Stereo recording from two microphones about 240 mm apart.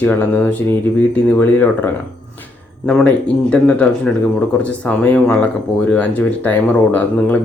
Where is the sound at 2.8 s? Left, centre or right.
Centre.